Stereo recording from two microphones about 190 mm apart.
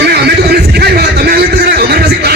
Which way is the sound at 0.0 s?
60° right (ahead or behind).